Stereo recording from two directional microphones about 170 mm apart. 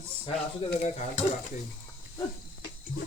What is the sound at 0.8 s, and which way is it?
Stir, 40° left (ahead or behind).